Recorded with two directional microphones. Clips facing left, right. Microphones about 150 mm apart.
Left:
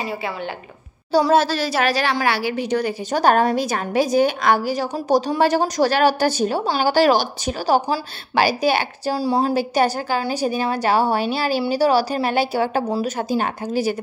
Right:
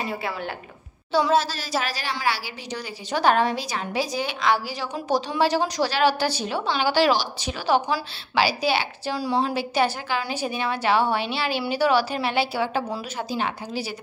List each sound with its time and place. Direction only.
1.3 s a woman's voice: 65° left (ahead or behind)
4.9 s a woman's voice: 40° left (ahead or behind)
9.1 s a woman's voice: 35° left (ahead or behind)